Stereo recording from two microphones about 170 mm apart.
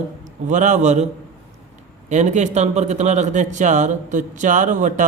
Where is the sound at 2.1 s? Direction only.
45° right (ahead or behind).